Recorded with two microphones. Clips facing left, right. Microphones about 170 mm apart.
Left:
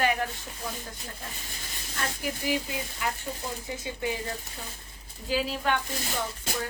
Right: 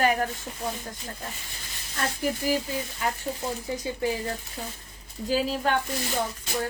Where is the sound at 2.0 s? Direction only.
45° right (ahead or behind).